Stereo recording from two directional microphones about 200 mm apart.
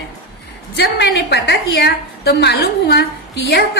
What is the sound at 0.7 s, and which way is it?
A woman's voice, 55° left (ahead or behind).